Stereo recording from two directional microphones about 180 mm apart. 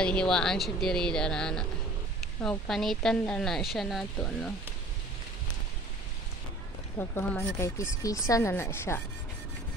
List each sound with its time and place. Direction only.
0.0 s speech: 5° left (ahead or behind)
2.7 s speech: centre (ahead or behind)
7.0 s speech: 15° left (ahead or behind)